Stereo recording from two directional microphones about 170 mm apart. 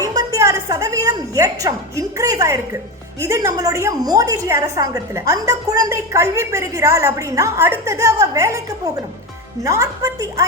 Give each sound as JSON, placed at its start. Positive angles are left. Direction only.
{"t": 0.0, "sound": "a woman's voice", "side_deg": -20}